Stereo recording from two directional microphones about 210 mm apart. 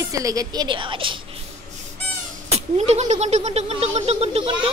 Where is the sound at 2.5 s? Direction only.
30° right (ahead or behind).